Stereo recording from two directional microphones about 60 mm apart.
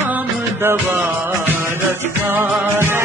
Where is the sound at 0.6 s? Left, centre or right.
Right.